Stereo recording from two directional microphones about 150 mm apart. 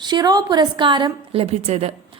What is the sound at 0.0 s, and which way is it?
A woman's voice, 30° right (ahead or behind).